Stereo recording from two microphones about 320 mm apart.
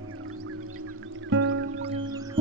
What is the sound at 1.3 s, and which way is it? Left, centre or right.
Music, right.